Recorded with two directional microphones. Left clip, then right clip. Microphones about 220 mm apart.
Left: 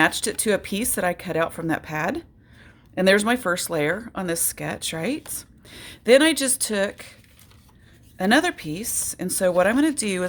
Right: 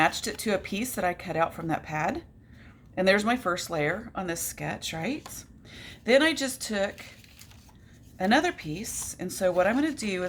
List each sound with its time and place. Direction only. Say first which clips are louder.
0.0 s speech: left 5 dB; 50° left (ahead or behind)
8.2 s speech: left 4 dB; 50° left (ahead or behind)